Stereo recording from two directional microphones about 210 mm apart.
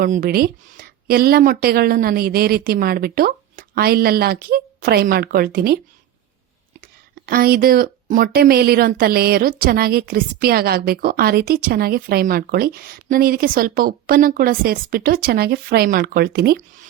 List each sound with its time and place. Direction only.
0.0 s speech: 40° right (ahead or behind)
7.3 s speech: 45° right (ahead or behind)